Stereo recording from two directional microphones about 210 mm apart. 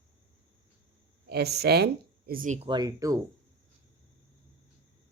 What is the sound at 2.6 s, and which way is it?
Speech, 20° right (ahead or behind).